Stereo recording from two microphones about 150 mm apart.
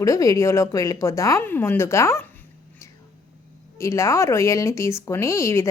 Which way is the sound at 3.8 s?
20° left (ahead or behind).